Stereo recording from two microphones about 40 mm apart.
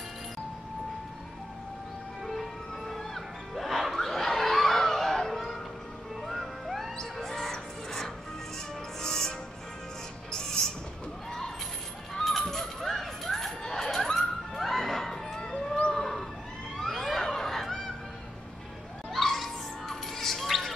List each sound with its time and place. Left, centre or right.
2.9 s music: centre
3.9 s a sound: centre
6.2 s music: centre
10.3 s music: centre
12.1 s a sound: centre
15.9 s cat: centre
16.8 s a sound: centre
17.3 s fowl: centre
19.1 s bird: centre